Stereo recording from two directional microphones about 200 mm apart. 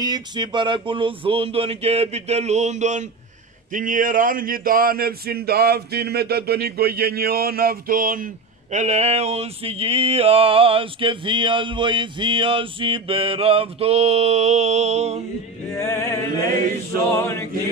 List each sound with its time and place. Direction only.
0.0 s male singing: 20° right (ahead or behind); by 3.1 s 35° right (ahead or behind)
3.7 s speech: 40° right (ahead or behind)
8.7 s male singing: 35° right (ahead or behind)
15.7 s music: 15° left (ahead or behind)
17.2 s music: 15° left (ahead or behind)